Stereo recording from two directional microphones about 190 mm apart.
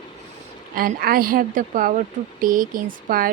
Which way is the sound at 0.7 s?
50° right (ahead or behind).